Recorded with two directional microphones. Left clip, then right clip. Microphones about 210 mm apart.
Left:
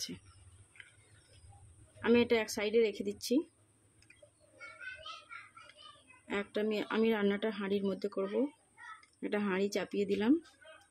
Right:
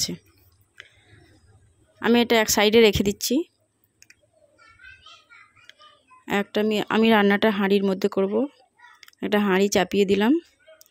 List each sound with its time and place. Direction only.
2.0 s a woman's voice: 40° right (ahead or behind)
6.2 s speech: 40° right (ahead or behind)